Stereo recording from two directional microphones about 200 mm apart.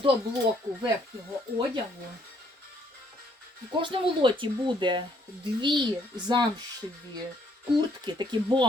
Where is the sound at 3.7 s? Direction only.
25° right (ahead or behind).